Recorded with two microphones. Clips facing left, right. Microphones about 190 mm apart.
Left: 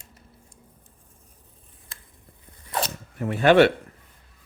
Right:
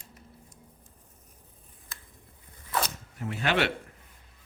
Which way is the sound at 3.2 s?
55° left (ahead or behind).